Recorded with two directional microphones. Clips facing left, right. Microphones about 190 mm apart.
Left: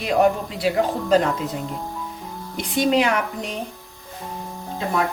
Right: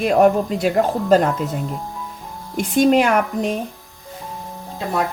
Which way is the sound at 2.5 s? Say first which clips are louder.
Right 5 dB; 50° right (ahead or behind).